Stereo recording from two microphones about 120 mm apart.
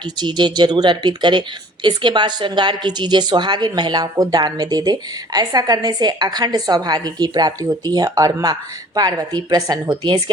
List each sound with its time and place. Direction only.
0.0 s speech: 40° right (ahead or behind)